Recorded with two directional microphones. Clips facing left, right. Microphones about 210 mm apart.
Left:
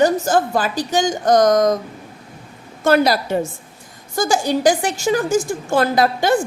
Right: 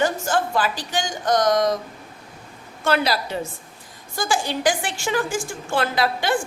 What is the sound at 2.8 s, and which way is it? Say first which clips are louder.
A woman's voice: left 6 dB; 45° left (ahead or behind).